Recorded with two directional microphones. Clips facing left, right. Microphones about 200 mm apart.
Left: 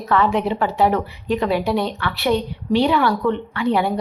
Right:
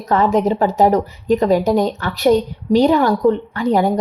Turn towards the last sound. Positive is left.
turn(degrees=-45)  # may be behind; listen again after turning